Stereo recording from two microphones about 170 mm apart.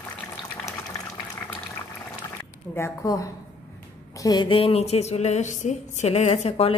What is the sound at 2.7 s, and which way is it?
A woman's voice, 15° left (ahead or behind).